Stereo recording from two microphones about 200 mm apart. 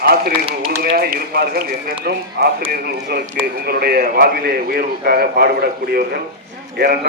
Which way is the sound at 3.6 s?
50° right (ahead or behind).